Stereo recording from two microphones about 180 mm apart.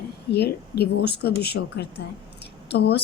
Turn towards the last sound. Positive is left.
turn(degrees=65)  # may be behind; listen again after turning